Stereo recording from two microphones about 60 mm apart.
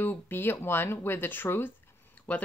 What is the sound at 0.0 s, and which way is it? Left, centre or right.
Speech, left.